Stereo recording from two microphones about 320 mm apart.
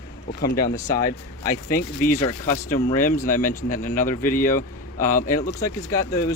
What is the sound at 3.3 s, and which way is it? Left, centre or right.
Speech, left.